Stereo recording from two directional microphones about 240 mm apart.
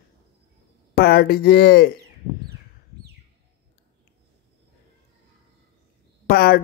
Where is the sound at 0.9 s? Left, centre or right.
Left.